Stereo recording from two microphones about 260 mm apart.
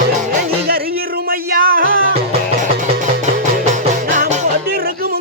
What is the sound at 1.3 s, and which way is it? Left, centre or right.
Music, right.